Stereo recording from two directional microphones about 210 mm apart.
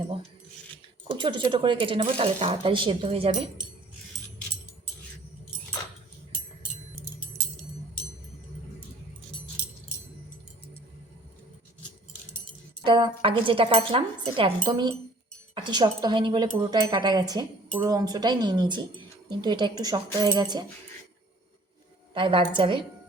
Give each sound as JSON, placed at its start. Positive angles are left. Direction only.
{"t": 1.1, "sound": "speech", "side_deg": -20}
{"t": 12.8, "sound": "speech", "side_deg": -20}
{"t": 22.1, "sound": "speech", "side_deg": -25}